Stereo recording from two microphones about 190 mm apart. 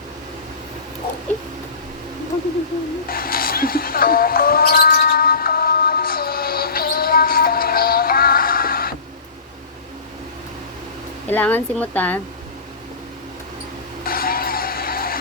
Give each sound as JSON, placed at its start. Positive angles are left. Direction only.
{"t": 3.1, "sound": "music", "side_deg": 50}
{"t": 11.3, "sound": "speech", "side_deg": 10}
{"t": 14.0, "sound": "music", "side_deg": 50}